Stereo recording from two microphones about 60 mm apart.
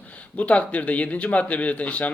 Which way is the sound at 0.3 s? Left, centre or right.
Left.